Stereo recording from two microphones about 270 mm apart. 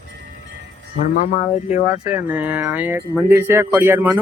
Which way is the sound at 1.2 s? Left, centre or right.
Left.